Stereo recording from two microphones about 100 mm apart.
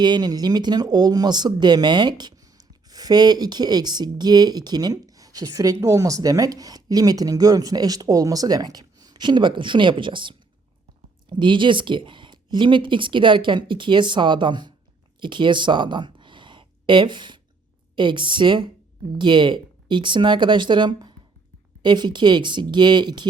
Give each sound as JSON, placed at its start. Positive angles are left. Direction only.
{"t": 0.0, "sound": "speech", "side_deg": -45}